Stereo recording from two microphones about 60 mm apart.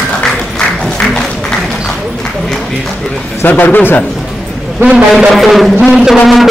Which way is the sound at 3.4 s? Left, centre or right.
Left.